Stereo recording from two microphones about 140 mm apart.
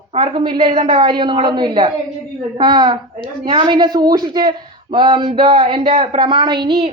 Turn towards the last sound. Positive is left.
turn(degrees=-40)  # may be behind; listen again after turning